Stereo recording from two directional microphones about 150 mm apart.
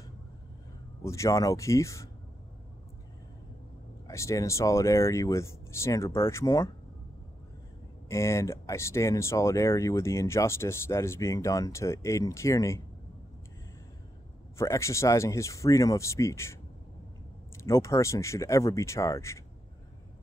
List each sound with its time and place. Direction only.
1.0 s speech: 20° left (ahead or behind)
4.1 s speech: 20° left (ahead or behind)
8.1 s speech: 20° left (ahead or behind)
14.6 s speech: 20° left (ahead or behind)
17.6 s speech: 20° left (ahead or behind)